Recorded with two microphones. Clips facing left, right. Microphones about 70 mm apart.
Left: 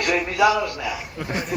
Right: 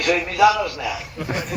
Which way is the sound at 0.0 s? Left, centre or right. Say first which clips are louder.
Right 1 dB; centre.